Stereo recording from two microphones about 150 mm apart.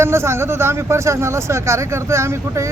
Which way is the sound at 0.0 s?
15° right (ahead or behind).